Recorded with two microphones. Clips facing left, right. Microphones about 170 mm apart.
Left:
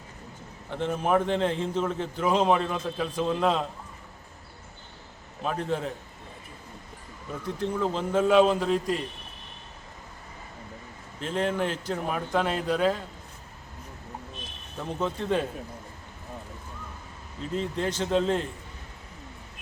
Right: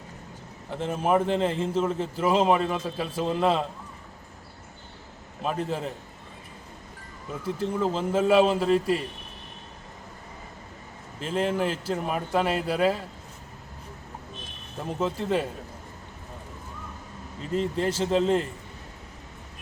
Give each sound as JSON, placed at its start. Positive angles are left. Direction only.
{"t": 0.7, "sound": "a man's voice", "side_deg": 0}
{"t": 5.4, "sound": "a man's voice", "side_deg": 0}
{"t": 7.4, "sound": "a man's voice", "side_deg": -5}
{"t": 11.2, "sound": "a man's voice", "side_deg": -5}
{"t": 14.8, "sound": "a man's voice", "side_deg": -5}
{"t": 17.5, "sound": "a man's voice", "side_deg": 0}